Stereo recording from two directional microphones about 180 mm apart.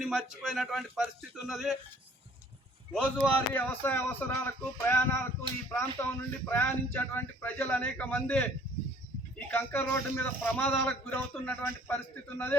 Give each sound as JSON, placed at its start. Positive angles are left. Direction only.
{"t": 0.0, "sound": "speech", "side_deg": 0}
{"t": 2.9, "sound": "a man's voice", "side_deg": 5}